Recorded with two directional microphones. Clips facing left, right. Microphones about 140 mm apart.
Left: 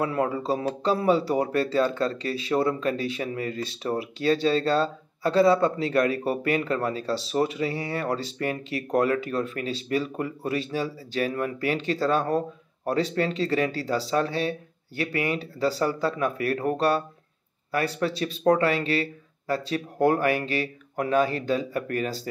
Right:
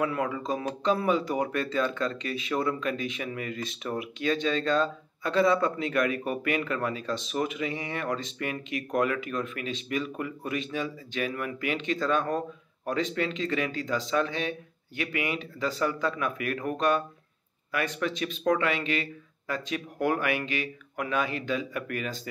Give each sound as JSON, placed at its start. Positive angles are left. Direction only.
{"t": 0.0, "sound": "speech", "side_deg": 30}